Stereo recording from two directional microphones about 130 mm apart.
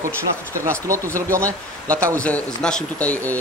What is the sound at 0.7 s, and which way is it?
Speech, 20° right (ahead or behind).